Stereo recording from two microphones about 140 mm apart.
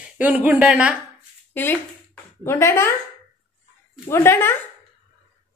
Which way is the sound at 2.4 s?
20° left (ahead or behind).